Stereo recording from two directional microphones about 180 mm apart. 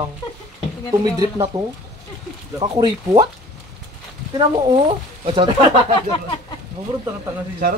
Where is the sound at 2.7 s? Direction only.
25° right (ahead or behind).